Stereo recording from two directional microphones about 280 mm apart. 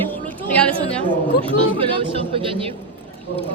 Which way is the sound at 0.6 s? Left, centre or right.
Centre.